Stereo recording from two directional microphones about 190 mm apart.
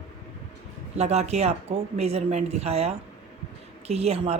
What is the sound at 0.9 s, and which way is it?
A woman's voice, 35° right (ahead or behind).